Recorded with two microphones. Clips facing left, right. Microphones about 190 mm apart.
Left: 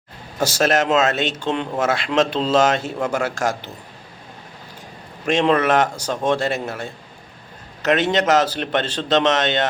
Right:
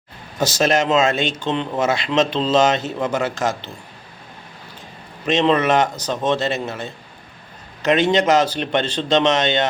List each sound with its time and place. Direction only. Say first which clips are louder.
0.3 s speech: even; 10° left (ahead or behind)
5.2 s speech: even; 10° left (ahead or behind)